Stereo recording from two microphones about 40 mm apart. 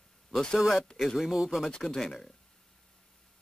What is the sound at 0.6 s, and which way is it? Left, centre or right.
Speech, centre.